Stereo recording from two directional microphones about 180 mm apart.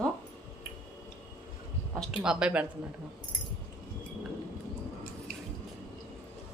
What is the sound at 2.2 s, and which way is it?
Speech, 5° right (ahead or behind).